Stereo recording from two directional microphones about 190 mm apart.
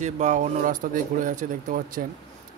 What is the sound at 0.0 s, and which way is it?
Speech, 40° right (ahead or behind).